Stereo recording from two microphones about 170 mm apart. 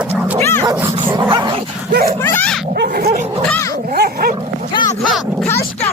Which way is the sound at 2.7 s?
65° right (ahead or behind).